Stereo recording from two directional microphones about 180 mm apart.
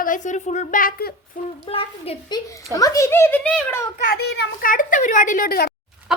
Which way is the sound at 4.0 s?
55° left (ahead or behind).